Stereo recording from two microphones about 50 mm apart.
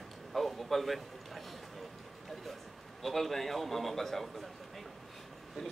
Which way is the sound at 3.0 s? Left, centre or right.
Centre.